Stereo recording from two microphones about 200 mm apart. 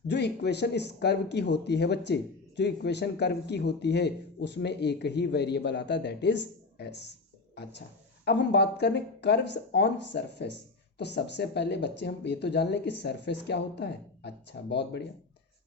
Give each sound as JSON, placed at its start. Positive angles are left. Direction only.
{"t": 0.1, "sound": "a man's voice", "side_deg": 55}